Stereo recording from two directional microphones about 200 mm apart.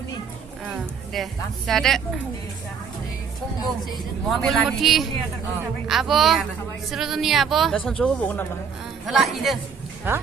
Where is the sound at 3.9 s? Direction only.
Centre (ahead or behind).